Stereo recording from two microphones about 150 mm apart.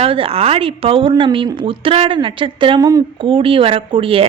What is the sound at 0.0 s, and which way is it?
Speech, 40° right (ahead or behind).